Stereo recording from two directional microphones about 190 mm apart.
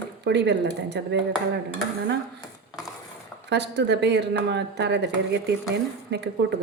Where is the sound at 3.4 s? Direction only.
65° right (ahead or behind).